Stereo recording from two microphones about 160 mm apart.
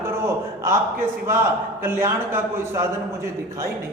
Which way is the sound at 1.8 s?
15° right (ahead or behind).